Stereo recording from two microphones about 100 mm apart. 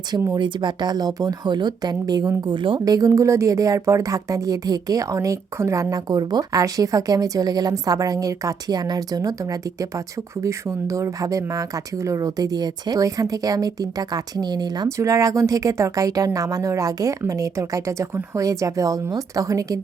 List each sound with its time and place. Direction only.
0.3 s speech: 50° right (ahead or behind)
2.8 s speech: 40° right (ahead or behind)
14.8 s speech: 30° right (ahead or behind)